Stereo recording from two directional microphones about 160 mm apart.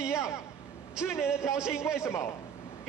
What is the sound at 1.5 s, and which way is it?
Speech, 5° right (ahead or behind).